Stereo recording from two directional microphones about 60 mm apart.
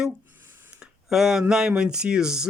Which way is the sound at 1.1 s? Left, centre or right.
Centre.